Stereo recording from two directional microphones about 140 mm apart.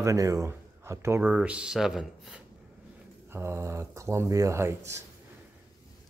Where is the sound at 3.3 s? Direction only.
20° right (ahead or behind).